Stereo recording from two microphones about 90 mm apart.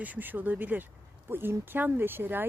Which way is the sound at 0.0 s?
20° right (ahead or behind).